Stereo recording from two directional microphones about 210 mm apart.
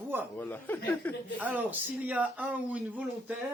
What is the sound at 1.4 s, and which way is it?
Speech, 10° right (ahead or behind).